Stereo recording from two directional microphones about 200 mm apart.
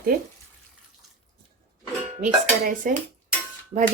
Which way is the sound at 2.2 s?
45° right (ahead or behind).